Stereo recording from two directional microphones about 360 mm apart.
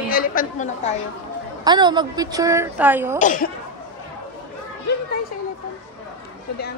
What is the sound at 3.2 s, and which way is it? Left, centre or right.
Speech, left.